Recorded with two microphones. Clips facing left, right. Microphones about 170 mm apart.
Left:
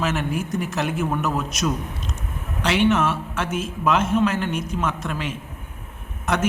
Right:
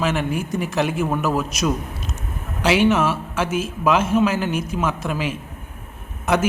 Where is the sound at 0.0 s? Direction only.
Centre (ahead or behind).